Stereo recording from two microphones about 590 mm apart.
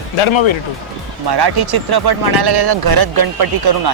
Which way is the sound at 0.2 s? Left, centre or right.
Left.